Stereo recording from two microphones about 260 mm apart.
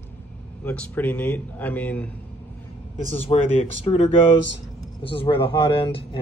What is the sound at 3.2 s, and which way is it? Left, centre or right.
Speech, left.